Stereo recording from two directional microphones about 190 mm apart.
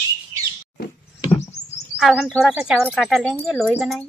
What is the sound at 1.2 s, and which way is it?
Rodents, 35° left (ahead or behind).